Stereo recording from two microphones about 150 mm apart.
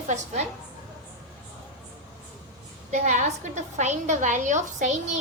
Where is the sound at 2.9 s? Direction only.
50° right (ahead or behind).